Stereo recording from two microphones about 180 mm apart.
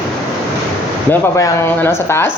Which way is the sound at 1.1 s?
20° left (ahead or behind).